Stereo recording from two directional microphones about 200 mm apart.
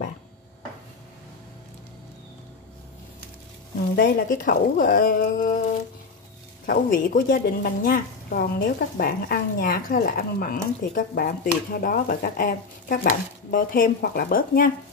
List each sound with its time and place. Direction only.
3.9 s a woman's voice: 45° left (ahead or behind)
6.6 s a woman's voice: 45° left (ahead or behind)